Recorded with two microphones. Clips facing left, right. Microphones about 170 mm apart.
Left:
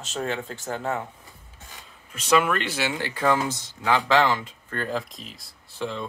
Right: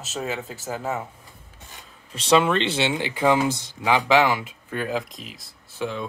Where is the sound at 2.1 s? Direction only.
30° right (ahead or behind).